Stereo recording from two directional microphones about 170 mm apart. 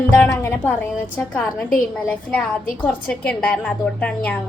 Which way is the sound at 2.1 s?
10° left (ahead or behind).